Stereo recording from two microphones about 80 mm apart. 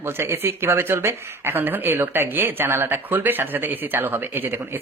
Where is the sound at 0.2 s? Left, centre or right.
Right.